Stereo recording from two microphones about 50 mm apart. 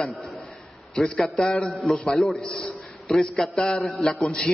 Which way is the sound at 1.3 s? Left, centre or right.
Centre.